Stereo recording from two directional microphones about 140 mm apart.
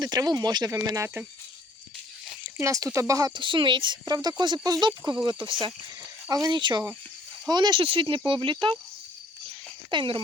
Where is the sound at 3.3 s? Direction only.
35° right (ahead or behind).